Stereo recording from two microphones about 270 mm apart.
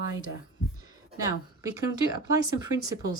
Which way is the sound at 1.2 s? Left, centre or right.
Centre.